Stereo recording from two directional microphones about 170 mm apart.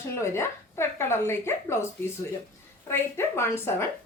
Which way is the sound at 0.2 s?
15° left (ahead or behind).